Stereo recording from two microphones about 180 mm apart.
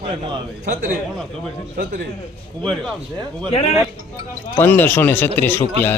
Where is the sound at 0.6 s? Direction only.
45° right (ahead or behind).